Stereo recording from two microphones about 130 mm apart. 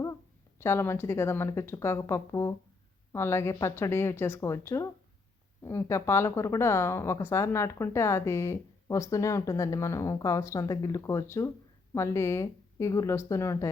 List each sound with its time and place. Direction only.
0.6 s speech: 20° left (ahead or behind)